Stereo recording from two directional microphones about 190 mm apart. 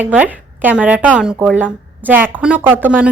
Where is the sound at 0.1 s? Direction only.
10° right (ahead or behind).